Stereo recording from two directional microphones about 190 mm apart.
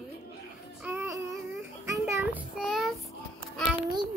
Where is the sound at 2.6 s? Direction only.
Centre (ahead or behind).